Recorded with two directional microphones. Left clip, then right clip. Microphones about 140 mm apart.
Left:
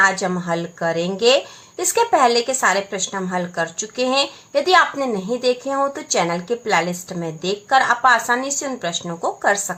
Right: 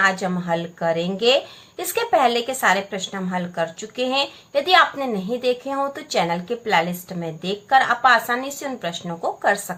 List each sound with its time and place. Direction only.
0.0 s a woman's voice: 25° left (ahead or behind)